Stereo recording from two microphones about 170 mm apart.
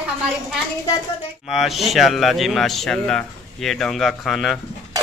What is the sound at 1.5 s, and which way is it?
Speech, centre (ahead or behind).